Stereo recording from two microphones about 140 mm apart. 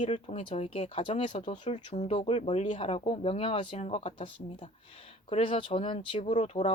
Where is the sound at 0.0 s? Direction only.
50° left (ahead or behind).